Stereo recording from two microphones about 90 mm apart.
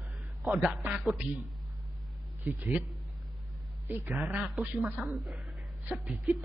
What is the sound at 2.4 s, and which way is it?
Speech, 10° right (ahead or behind).